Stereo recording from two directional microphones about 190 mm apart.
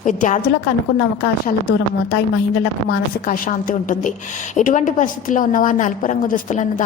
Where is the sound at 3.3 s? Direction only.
45° left (ahead or behind).